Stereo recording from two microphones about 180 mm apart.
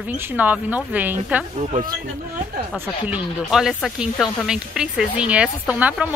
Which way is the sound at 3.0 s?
5° right (ahead or behind).